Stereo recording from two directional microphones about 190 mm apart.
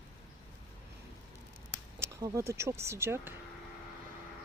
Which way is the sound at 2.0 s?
15° right (ahead or behind).